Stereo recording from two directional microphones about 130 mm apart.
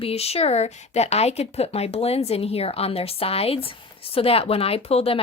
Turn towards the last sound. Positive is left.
turn(degrees=50)  # may be behind; listen again after turning